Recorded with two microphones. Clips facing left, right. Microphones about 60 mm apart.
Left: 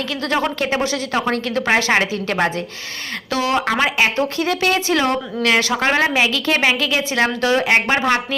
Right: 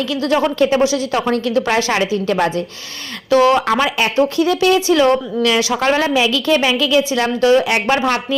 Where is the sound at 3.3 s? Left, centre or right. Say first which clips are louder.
Right 7 dB; right.